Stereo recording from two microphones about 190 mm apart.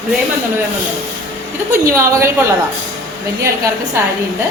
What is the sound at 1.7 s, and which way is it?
Speech, 10° right (ahead or behind).